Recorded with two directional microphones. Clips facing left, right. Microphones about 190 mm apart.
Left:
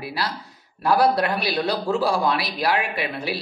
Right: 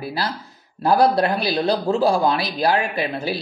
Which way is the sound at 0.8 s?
25° right (ahead or behind).